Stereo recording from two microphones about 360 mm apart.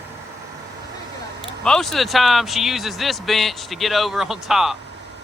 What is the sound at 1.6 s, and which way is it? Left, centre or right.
Speech, centre.